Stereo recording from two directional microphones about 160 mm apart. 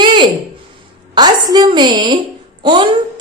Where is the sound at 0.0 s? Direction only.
30° right (ahead or behind).